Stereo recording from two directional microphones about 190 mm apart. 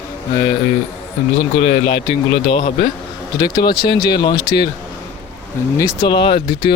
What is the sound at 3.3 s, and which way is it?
Speech, 20° left (ahead or behind).